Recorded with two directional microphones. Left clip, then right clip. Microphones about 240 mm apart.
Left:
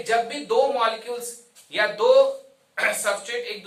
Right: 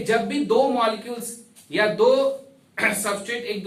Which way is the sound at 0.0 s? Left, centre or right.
Centre.